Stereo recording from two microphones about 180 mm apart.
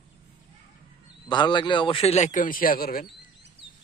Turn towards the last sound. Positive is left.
turn(degrees=55)  # may be behind; listen again after turning